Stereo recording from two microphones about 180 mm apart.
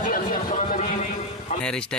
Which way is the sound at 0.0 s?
50° left (ahead or behind).